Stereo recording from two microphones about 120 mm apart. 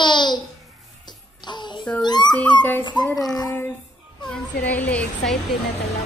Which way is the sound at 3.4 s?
20° left (ahead or behind).